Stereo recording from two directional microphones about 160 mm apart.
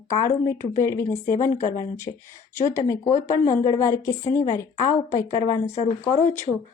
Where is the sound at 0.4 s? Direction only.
15° left (ahead or behind).